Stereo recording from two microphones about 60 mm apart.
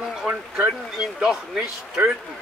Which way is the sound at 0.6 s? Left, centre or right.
Centre.